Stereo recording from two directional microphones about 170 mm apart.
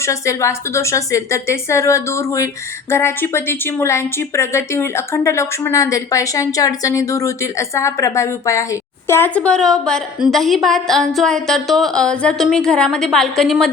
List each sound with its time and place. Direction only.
0.0 s speech: 15° left (ahead or behind); by 13.7 s centre (ahead or behind)